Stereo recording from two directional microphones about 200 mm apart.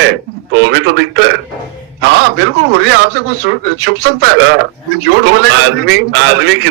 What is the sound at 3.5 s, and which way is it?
A man's voice, 60° right (ahead or behind).